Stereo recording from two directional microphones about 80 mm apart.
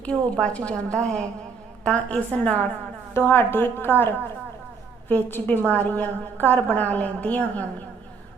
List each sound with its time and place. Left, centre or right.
0.0 s a woman's voice: centre
3.2 s a woman's voice: left